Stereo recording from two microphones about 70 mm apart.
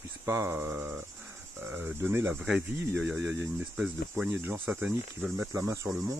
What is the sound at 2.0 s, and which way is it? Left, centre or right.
Speech, right.